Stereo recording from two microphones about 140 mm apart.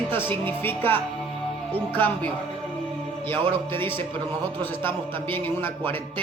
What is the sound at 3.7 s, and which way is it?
Speech, 15° left (ahead or behind).